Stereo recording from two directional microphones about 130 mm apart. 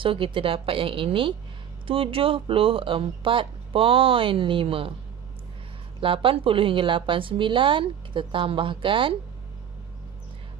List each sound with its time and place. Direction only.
0.0 s speech: 40° right (ahead or behind)
5.9 s a woman's voice: 40° right (ahead or behind)